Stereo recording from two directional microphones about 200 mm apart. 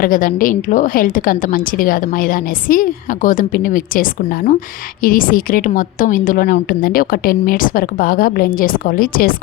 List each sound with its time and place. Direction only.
0.0 s a woman's voice: 45° left (ahead or behind)